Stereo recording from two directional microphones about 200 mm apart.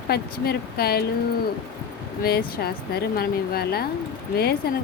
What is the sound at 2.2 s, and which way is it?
A woman's voice, 50° left (ahead or behind).